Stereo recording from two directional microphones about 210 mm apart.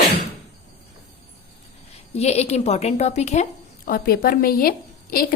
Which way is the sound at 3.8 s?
45° left (ahead or behind).